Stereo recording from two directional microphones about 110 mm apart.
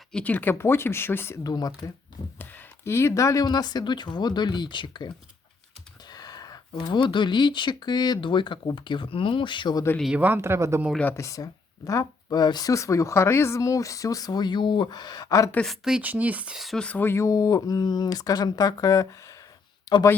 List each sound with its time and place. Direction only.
0.1 s speech: 10° left (ahead or behind)
1.5 s speech: 35° left (ahead or behind)
2.4 s speech: 15° left (ahead or behind); by 9.8 s 45° left (ahead or behind)
10.2 s speech: 15° right (ahead or behind)
11.2 s speech: 30° left (ahead or behind)
15.6 s speech: centre (ahead or behind)
16.6 s speech: centre (ahead or behind)
16.8 s speech: 15° left (ahead or behind); by 19.4 s 30° left (ahead or behind)